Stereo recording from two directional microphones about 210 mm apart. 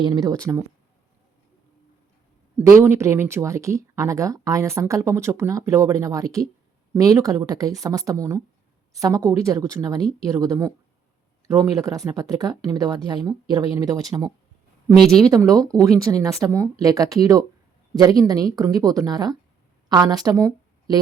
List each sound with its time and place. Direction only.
0.0 s a woman's voice: 15° right (ahead or behind)
2.8 s a woman's voice: 15° right (ahead or behind)
14.8 s speech: centre (ahead or behind)
15.2 s a woman's voice: 15° right (ahead or behind)